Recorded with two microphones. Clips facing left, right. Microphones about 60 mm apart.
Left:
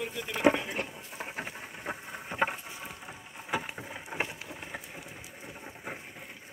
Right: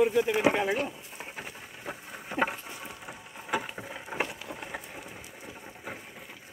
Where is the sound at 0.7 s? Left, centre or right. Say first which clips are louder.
Right 5 dB; left.